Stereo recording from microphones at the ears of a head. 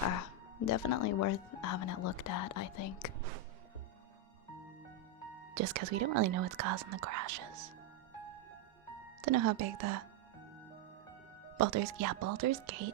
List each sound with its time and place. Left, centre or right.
0.0 s speech: left
5.5 s speech: right
9.2 s speech: right
11.5 s speech: right